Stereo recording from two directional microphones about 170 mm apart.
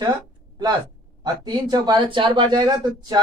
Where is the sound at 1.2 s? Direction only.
25° right (ahead or behind).